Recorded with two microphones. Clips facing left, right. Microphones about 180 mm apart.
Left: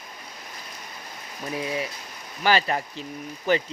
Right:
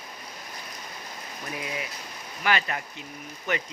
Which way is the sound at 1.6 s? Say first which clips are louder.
Left 7 dB; 30° left (ahead or behind).